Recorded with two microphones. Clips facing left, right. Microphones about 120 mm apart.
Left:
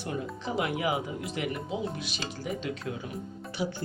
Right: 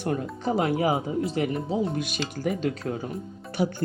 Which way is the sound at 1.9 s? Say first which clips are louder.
Right 7 dB; 50° right (ahead or behind).